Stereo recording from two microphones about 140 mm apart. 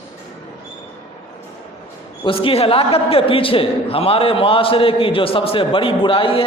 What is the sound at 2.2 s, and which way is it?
A man's voice, 40° left (ahead or behind).